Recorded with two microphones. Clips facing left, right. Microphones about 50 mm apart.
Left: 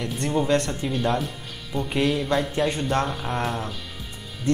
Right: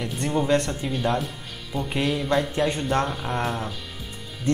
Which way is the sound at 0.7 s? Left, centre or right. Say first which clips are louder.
Left 1 dB; centre.